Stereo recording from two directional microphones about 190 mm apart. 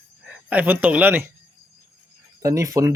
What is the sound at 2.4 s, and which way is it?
Speech, 15° right (ahead or behind).